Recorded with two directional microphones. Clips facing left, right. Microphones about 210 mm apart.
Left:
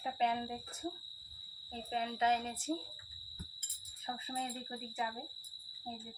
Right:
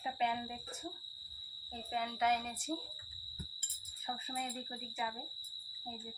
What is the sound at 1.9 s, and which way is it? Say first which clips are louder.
Speech: left 1 dB; 30° left (ahead or behind).